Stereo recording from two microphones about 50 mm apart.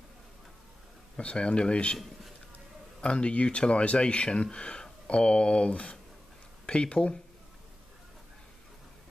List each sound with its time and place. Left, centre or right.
1.1 s speech: left
3.0 s speech: left